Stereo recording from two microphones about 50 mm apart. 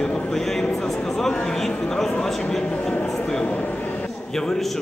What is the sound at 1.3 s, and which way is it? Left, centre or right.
Speech, centre.